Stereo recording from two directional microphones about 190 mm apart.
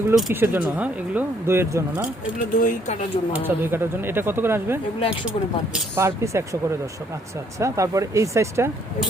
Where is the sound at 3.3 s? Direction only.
10° right (ahead or behind).